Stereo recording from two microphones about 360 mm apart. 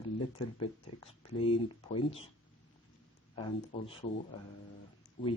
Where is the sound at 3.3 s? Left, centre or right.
Centre.